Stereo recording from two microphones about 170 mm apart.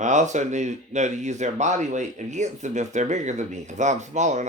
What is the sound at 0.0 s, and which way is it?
Speech, 45° right (ahead or behind).